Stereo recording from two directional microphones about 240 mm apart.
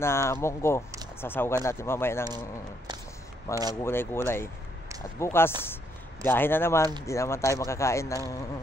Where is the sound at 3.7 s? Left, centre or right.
Centre.